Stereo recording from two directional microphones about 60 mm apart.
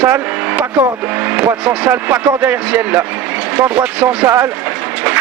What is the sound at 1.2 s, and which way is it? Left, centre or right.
Speech, right.